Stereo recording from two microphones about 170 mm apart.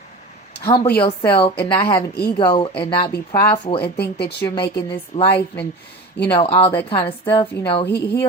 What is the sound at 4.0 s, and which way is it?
Speech, 75° left (ahead or behind).